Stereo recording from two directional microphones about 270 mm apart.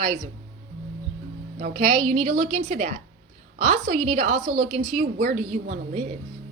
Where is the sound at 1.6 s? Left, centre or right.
Right.